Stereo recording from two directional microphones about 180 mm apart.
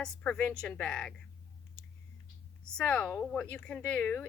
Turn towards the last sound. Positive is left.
turn(degrees=10)  # may be behind; listen again after turning